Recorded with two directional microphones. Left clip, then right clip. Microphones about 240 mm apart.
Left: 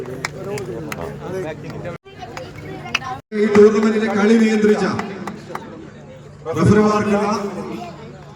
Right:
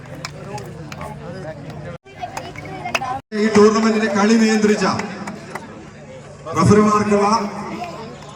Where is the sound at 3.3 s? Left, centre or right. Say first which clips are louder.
Left 2 dB; centre.